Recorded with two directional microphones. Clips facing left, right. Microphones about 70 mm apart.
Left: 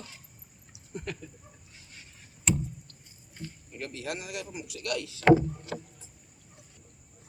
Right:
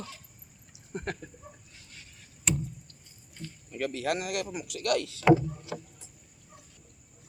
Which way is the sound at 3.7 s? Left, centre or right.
Right.